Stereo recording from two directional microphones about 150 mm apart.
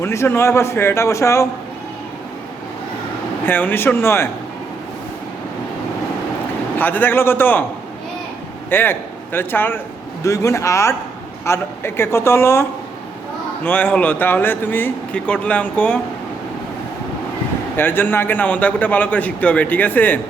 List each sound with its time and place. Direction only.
0.0 s a man's voice: 20° left (ahead or behind)
3.4 s a man's voice: 15° left (ahead or behind)
6.7 s a man's voice: 10° left (ahead or behind)
8.7 s a man's voice: 15° left (ahead or behind)
13.7 s a man's voice: 10° left (ahead or behind)
17.7 s a man's voice: 15° left (ahead or behind)